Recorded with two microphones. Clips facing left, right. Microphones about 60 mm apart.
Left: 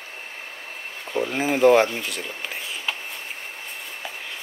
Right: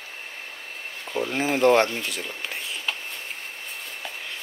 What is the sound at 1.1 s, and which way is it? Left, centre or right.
Speech, centre.